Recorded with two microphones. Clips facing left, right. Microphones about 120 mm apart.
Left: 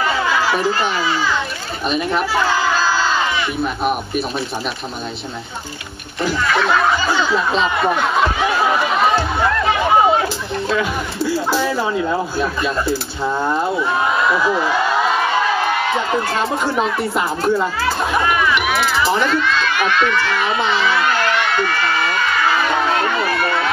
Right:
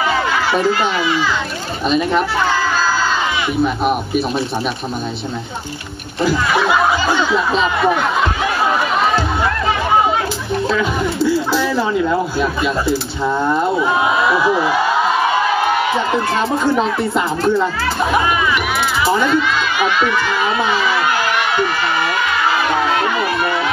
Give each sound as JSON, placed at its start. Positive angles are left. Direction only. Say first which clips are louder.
{"t": 1.9, "sound": "speech", "louder": "right 4 dB", "side_deg": 5}
{"t": 3.6, "sound": "speech", "louder": "right 4 dB", "side_deg": 0}
{"t": 6.2, "sound": "snicker", "louder": "right 2 dB", "side_deg": -15}
{"t": 7.3, "sound": "speech", "louder": "right 1 dB", "side_deg": 0}
{"t": 11.5, "sound": "speech", "louder": "right 2 dB", "side_deg": 10}
{"t": 13.7, "sound": "snicker", "louder": "right 2 dB", "side_deg": -10}
{"t": 16.7, "sound": "speech", "louder": "right 2 dB", "side_deg": 10}
{"t": 19.2, "sound": "crowd", "louder": "right 2 dB", "side_deg": -15}